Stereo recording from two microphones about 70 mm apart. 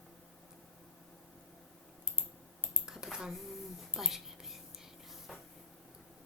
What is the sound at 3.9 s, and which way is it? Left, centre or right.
Whispering, centre.